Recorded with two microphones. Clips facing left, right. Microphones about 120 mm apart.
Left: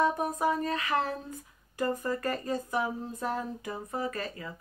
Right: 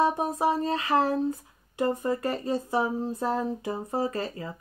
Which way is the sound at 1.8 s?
25° right (ahead or behind).